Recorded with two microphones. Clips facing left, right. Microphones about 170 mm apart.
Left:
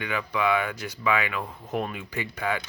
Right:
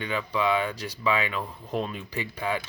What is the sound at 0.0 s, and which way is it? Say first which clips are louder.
Speech: even; 25° right (ahead or behind).